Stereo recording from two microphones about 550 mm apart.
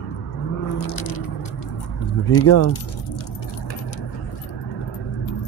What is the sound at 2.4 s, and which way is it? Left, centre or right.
Speech, left.